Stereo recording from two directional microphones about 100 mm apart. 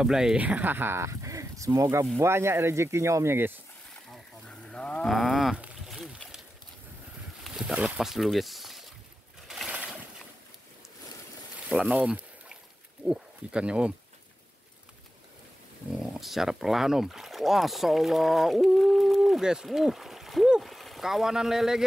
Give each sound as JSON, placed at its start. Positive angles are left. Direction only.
{"t": 0.0, "sound": "speech", "side_deg": -5}
{"t": 4.1, "sound": "livestock", "side_deg": 10}
{"t": 5.8, "sound": "a sound", "side_deg": 0}
{"t": 7.4, "sound": "speech", "side_deg": -5}
{"t": 9.7, "sound": "a sound", "side_deg": -10}
{"t": 11.8, "sound": "speech", "side_deg": -15}
{"t": 16.0, "sound": "speech", "side_deg": 0}